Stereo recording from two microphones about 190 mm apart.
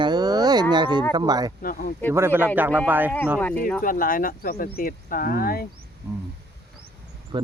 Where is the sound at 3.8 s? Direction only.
45° left (ahead or behind).